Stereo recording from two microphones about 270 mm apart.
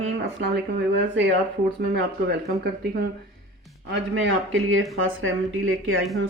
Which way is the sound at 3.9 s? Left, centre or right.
Right.